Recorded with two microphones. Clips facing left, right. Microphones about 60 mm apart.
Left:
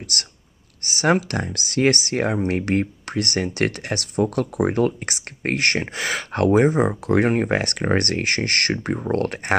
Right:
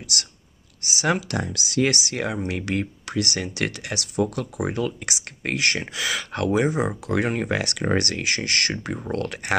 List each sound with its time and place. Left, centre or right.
0.1 s speech: left